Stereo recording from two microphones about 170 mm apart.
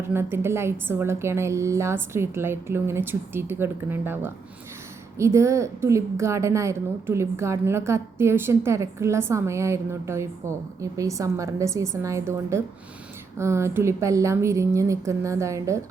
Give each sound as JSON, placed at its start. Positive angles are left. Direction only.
{"t": 0.0, "sound": "a woman's voice", "side_deg": -15}